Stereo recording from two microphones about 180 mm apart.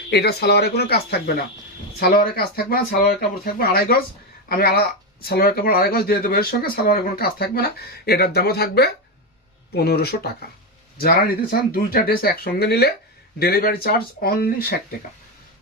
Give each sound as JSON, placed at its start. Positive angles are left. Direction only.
{"t": 0.1, "sound": "speech", "side_deg": 65}